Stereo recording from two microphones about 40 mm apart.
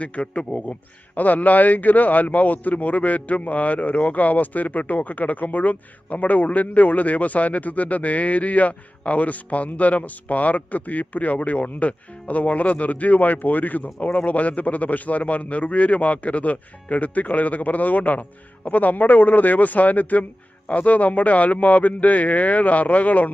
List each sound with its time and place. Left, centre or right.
0.0 s a man's voice: left